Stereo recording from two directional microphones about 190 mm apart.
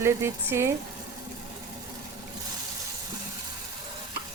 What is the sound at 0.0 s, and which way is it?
Speech, 15° right (ahead or behind).